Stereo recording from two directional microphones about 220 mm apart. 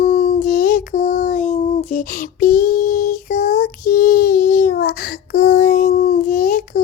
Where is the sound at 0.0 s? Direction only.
30° left (ahead or behind).